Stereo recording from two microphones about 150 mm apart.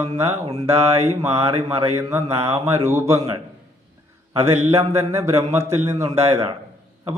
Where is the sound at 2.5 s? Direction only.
45° right (ahead or behind).